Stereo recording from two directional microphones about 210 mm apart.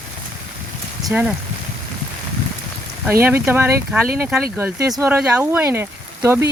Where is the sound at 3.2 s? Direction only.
10° right (ahead or behind).